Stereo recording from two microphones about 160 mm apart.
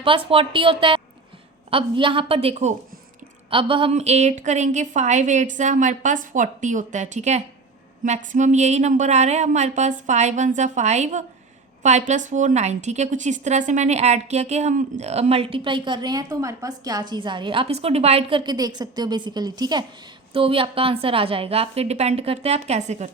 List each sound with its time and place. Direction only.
0.0 s a woman's voice: 35° right (ahead or behind)